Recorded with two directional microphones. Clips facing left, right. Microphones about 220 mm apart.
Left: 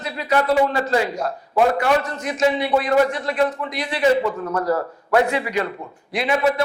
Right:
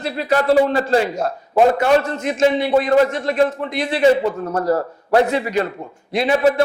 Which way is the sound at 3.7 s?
25° right (ahead or behind).